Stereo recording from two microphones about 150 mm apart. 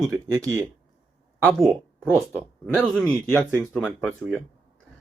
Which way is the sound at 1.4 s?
Centre (ahead or behind).